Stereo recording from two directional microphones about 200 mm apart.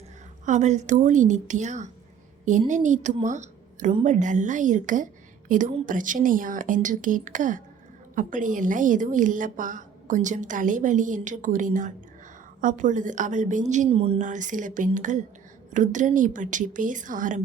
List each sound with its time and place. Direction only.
0.4 s a woman's voice: 35° right (ahead or behind)
3.2 s a sound: 35° right (ahead or behind)
4.0 s a woman's voice: 35° right (ahead or behind)